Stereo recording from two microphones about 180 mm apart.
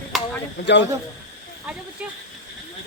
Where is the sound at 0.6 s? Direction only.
70° left (ahead or behind).